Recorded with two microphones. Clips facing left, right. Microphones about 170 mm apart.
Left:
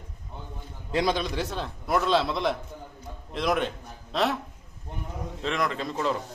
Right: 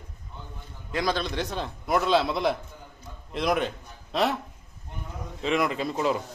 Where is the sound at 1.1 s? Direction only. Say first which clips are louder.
Even; 10° left (ahead or behind).